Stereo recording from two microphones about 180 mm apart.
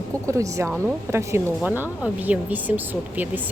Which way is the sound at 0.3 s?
15° right (ahead or behind).